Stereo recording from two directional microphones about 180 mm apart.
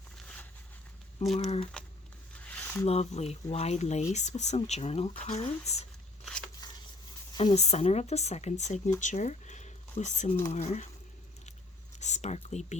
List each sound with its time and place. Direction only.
1.4 s speech: 35° left (ahead or behind)
2.4 s squish: 10° left (ahead or behind)
2.8 s speech: 35° left (ahead or behind)
6.6 s a sound: 25° left (ahead or behind)
7.3 s speech: 35° left (ahead or behind)
11.9 s speech: 40° left (ahead or behind)